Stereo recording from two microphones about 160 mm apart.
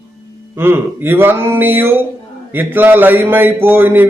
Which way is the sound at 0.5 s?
15° right (ahead or behind).